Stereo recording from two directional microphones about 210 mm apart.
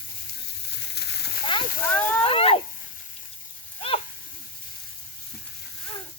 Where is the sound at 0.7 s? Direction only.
55° left (ahead or behind).